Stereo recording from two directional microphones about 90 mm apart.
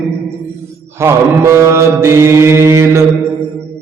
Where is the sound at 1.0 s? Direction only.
30° right (ahead or behind).